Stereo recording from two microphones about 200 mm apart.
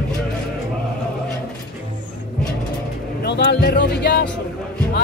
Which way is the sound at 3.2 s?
55° left (ahead or behind).